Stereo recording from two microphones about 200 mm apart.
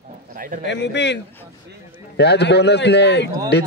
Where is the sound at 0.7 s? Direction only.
60° left (ahead or behind).